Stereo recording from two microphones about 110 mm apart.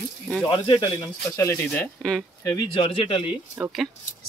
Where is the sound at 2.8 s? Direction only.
55° left (ahead or behind).